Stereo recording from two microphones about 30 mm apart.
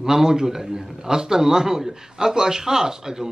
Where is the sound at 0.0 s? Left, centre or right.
Centre.